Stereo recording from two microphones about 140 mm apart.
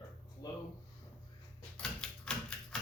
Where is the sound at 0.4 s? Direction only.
25° left (ahead or behind).